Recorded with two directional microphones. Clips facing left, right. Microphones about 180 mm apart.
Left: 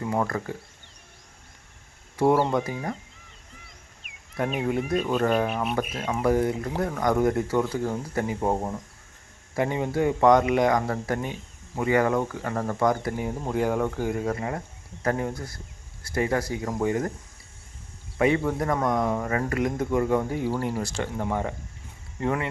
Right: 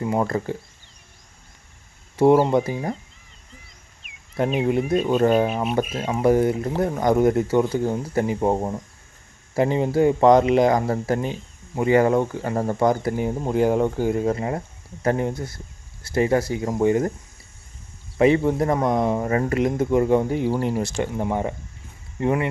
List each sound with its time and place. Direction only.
0.0 s speech: 20° right (ahead or behind)
2.1 s speech: 25° right (ahead or behind)
4.4 s speech: 25° right (ahead or behind)
18.2 s speech: 25° right (ahead or behind)